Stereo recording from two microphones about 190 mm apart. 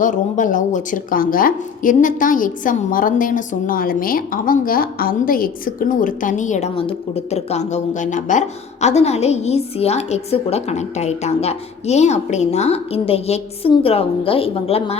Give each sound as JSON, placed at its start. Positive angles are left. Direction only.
{"t": 0.0, "sound": "speech", "side_deg": 45}